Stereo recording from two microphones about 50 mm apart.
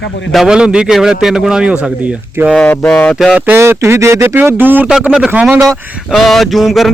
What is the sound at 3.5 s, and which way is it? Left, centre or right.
Speech, right.